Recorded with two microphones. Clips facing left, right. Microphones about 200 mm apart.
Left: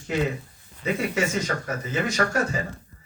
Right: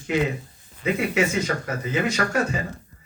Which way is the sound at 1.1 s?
60° right (ahead or behind).